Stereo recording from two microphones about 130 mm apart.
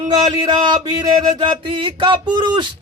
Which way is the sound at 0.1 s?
30° right (ahead or behind).